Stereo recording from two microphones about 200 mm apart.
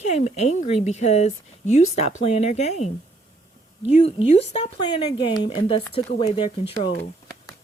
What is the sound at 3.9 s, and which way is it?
Speech, 30° left (ahead or behind).